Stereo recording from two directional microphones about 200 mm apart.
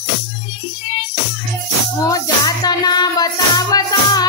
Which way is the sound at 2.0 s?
15° left (ahead or behind).